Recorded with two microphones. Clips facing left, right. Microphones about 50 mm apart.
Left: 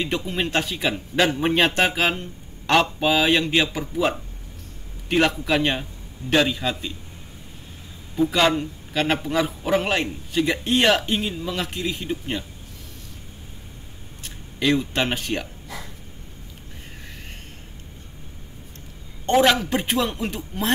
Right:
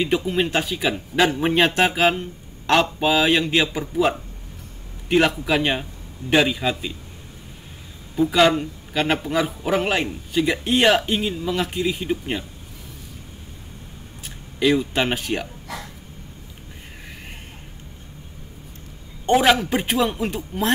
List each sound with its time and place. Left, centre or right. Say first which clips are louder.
0.0 s a man's voice: right 4 dB; centre
5.4 s speech: right 1 dB; centre
8.2 s a man's voice: right 2 dB; centre
14.2 s speech: right 3 dB; centre
15.7 s a sound: right 3 dB; right
19.2 s a man's voice: right 1 dB; centre